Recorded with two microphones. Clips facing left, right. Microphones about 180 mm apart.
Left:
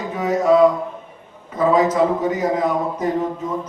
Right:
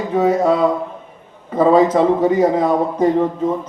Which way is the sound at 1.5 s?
30° right (ahead or behind).